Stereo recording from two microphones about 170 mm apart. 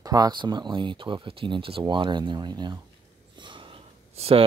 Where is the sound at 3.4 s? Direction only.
30° right (ahead or behind).